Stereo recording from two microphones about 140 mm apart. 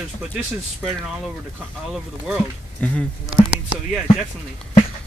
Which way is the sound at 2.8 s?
10° left (ahead or behind).